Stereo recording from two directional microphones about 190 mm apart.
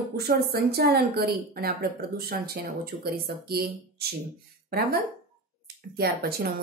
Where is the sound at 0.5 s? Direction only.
55° right (ahead or behind).